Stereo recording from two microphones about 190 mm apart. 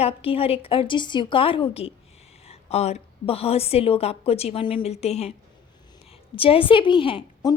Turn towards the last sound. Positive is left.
turn(degrees=25)  # may be behind; listen again after turning